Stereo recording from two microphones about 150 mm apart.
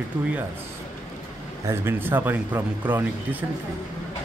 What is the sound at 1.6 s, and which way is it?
Speech, 15° right (ahead or behind).